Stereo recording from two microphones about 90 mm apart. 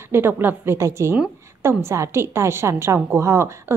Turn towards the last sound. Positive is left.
turn(degrees=-30)  # may be behind; listen again after turning